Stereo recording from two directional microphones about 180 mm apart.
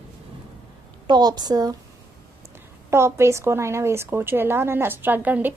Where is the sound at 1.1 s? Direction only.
20° right (ahead or behind).